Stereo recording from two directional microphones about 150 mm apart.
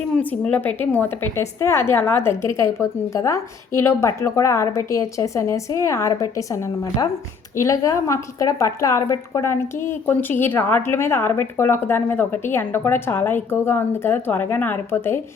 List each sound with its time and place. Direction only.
0.2 s a woman's voice: 10° left (ahead or behind)